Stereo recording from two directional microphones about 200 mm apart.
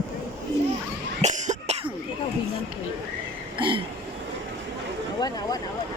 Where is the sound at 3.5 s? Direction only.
25° right (ahead or behind).